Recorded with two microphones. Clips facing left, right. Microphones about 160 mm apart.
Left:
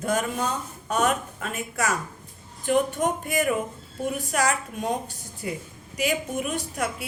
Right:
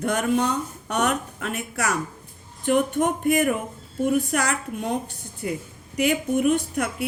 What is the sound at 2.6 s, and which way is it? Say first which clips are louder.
Speech: right 2 dB; 60° right (ahead or behind).